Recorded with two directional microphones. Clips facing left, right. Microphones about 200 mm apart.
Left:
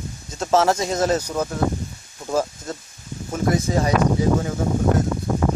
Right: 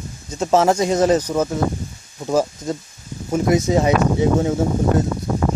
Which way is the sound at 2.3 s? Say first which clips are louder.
Right 4 dB; 10° right (ahead or behind).